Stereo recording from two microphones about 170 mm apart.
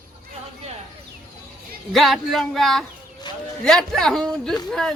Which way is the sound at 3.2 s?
25° left (ahead or behind).